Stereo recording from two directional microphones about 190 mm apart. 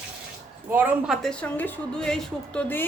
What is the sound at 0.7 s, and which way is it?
A woman's voice, 5° right (ahead or behind).